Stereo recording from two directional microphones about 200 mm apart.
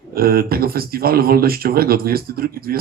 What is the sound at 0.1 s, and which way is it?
Speech, 50° right (ahead or behind).